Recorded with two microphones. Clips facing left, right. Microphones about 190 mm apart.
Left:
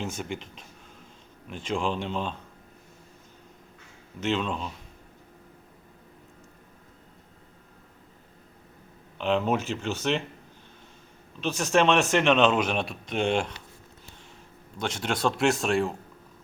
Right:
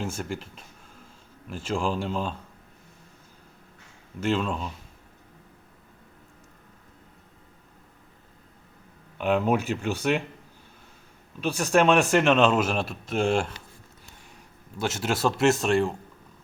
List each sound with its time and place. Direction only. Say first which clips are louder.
0.0 s speech: right 1 dB; 5° right (ahead or behind)
4.3 s speech: right 2 dB; 5° right (ahead or behind)
9.1 s speech: right 2 dB; 10° right (ahead or behind)
11.3 s speech: right 1 dB; 10° right (ahead or behind)
14.8 s speech: right 2 dB; 5° right (ahead or behind)